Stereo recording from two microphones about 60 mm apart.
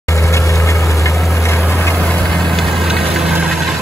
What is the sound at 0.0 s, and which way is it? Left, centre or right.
Vehicle, left.